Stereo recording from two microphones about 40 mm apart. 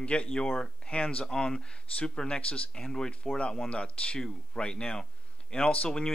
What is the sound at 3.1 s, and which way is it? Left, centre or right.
Speech, left.